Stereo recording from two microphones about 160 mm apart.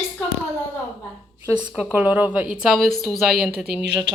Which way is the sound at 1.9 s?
10° right (ahead or behind).